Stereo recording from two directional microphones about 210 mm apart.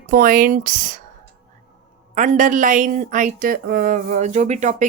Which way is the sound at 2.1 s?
35° right (ahead or behind).